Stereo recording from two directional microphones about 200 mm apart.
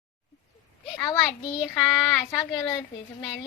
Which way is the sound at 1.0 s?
20° left (ahead or behind).